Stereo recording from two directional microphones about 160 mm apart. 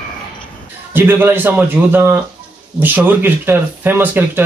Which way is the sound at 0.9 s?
10° right (ahead or behind).